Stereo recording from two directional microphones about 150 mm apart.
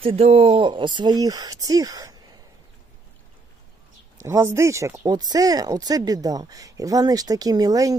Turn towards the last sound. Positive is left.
turn(degrees=-25)  # may be behind; listen again after turning